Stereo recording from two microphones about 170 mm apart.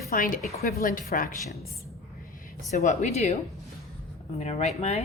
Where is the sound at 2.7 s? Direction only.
45° left (ahead or behind).